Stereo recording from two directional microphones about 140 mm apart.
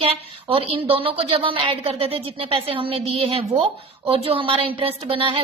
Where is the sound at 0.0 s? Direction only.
45° right (ahead or behind).